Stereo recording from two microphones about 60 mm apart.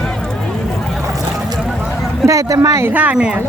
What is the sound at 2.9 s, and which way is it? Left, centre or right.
Speech, right.